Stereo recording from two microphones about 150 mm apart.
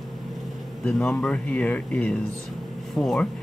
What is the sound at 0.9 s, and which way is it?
Speech, 5° left (ahead or behind).